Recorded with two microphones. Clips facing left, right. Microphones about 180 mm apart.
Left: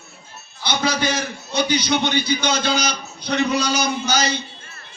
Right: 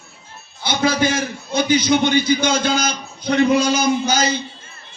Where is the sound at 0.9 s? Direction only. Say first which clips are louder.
Right 5 dB; 50° right (ahead or behind).